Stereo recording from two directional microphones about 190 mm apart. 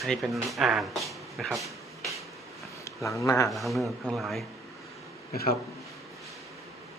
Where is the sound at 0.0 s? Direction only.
Centre (ahead or behind).